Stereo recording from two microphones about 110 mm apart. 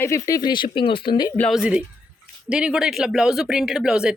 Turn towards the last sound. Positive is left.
turn(degrees=-5)  # may be behind; listen again after turning